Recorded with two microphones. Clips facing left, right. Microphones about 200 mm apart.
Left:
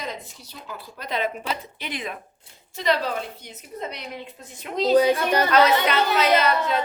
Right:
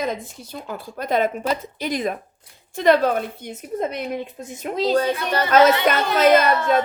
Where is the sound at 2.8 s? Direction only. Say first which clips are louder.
Right 7 dB; 55° right (ahead or behind).